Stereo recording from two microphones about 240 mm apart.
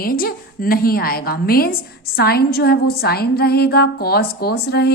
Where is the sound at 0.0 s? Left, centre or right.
Left.